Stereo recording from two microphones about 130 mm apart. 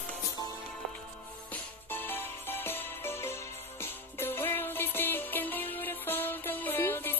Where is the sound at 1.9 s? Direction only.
15° left (ahead or behind).